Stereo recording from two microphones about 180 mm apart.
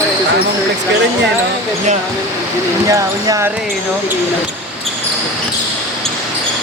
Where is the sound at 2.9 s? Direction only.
20° right (ahead or behind).